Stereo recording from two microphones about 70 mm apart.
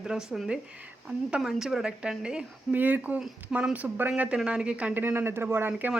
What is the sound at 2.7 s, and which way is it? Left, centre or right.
Speech, right.